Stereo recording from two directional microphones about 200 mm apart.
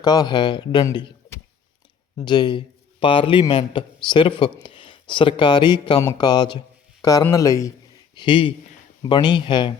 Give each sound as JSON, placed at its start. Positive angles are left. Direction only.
{"t": 0.0, "sound": "a man's voice", "side_deg": 20}